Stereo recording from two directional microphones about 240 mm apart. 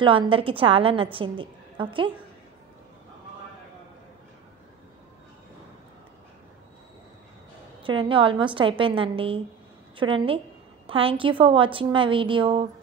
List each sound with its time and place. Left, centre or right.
0.0 s a woman's voice: right
7.8 s a woman's voice: right